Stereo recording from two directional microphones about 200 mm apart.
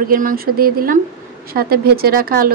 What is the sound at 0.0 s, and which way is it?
Speech, 45° right (ahead or behind).